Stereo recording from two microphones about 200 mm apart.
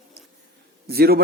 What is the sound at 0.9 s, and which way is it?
Speech, 50° right (ahead or behind).